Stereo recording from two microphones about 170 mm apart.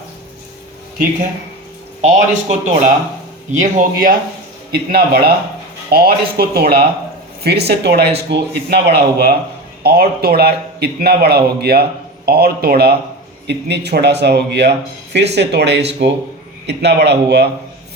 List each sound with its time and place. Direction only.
2.0 s speech: 40° right (ahead or behind)
4.7 s a man's voice: 65° right (ahead or behind)
9.8 s a man's voice: 65° right (ahead or behind)
13.5 s speech: 80° right